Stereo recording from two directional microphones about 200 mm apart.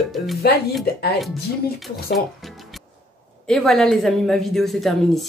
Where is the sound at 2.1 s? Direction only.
Centre (ahead or behind).